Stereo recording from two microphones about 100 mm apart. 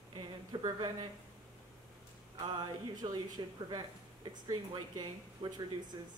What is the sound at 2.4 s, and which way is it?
Speech, 40° right (ahead or behind).